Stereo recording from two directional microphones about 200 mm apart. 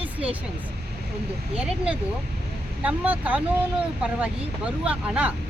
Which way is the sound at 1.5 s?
5° right (ahead or behind).